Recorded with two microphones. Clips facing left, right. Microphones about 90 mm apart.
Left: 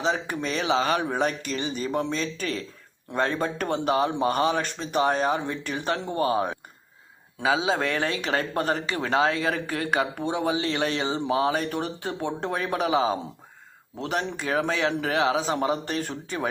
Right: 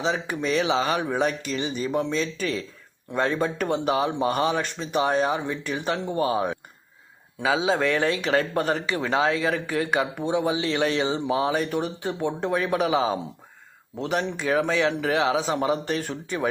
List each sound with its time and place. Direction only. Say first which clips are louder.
0.0 s speech: right 1 dB; 45° left (ahead or behind)